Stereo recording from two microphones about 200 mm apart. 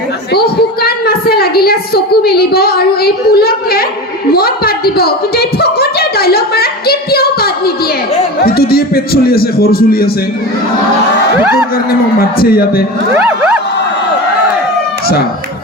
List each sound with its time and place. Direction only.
0.3 s a woman's voice: 50° left (ahead or behind)
4.3 s a sound: 50° left (ahead or behind)
9.2 s a man's voice: 50° left (ahead or behind)
12.2 s a man's voice: 50° left (ahead or behind)
13.1 s crowd: 10° right (ahead or behind)